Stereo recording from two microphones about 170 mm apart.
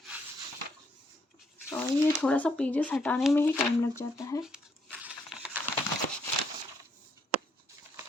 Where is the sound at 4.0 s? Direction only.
20° left (ahead or behind).